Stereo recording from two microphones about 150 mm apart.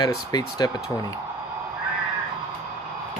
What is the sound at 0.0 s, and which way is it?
Speech, 25° left (ahead or behind).